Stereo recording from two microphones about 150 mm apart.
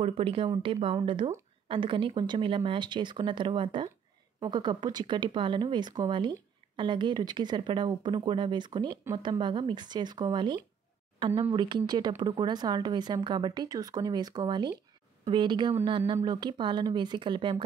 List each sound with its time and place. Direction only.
0.0 s speech: 40° right (ahead or behind)